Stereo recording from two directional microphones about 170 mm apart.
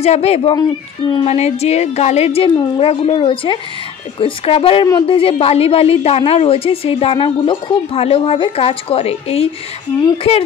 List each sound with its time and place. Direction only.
0.0 s a woman's voice: 40° left (ahead or behind)